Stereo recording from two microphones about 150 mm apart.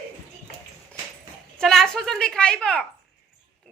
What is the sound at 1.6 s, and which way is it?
A woman's voice, 5° left (ahead or behind).